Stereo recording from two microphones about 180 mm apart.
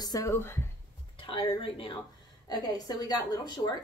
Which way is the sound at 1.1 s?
30° left (ahead or behind).